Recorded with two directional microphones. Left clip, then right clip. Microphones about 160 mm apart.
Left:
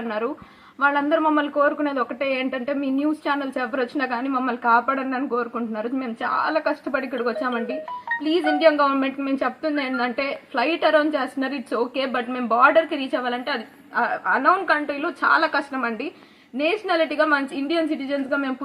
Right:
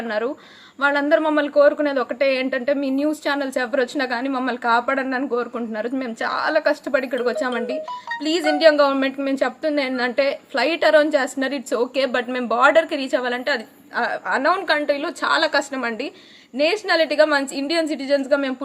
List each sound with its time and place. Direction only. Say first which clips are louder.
0.1 s a woman's voice: right 3 dB; 15° right (ahead or behind)